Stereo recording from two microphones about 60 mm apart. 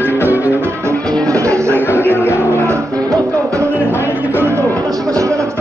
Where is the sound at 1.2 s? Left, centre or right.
Right.